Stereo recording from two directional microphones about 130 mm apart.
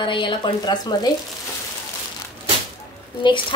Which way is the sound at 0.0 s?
40° left (ahead or behind).